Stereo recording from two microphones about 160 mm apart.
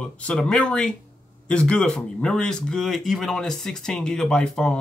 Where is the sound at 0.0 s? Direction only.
5° left (ahead or behind).